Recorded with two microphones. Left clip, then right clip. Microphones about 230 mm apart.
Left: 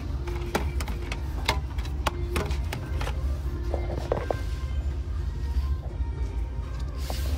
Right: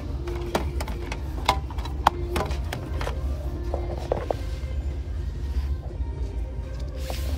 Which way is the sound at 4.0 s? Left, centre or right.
Centre.